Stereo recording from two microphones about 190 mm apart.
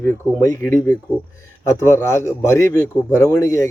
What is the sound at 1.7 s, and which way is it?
A man's voice, 15° left (ahead or behind).